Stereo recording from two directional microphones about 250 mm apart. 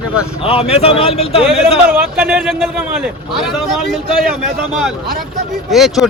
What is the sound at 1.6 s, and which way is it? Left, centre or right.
A man's voice, centre.